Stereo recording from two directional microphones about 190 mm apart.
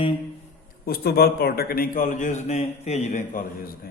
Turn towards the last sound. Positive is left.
turn(degrees=50)  # may be behind; listen again after turning